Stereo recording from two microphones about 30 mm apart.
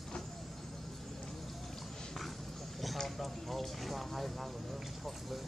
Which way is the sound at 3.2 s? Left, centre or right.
Centre.